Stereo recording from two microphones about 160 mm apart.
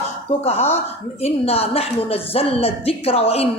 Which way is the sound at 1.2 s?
40° left (ahead or behind).